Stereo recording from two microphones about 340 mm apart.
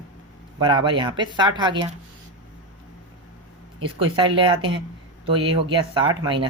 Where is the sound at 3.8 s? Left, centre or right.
Centre.